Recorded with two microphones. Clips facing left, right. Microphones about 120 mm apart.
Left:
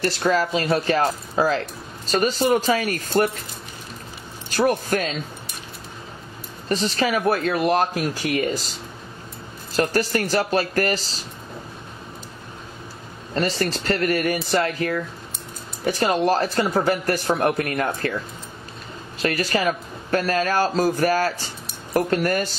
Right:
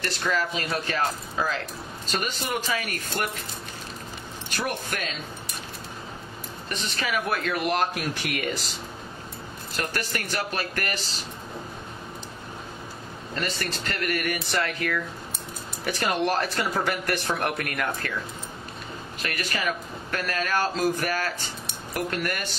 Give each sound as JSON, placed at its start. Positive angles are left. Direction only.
{"t": 0.0, "sound": "a man's voice", "side_deg": 40}
{"t": 4.6, "sound": "a man's voice", "side_deg": 40}
{"t": 6.7, "sound": "a man's voice", "side_deg": 35}
{"t": 9.8, "sound": "a man's voice", "side_deg": 35}
{"t": 13.3, "sound": "a man's voice", "side_deg": 35}
{"t": 19.2, "sound": "a man's voice", "side_deg": 35}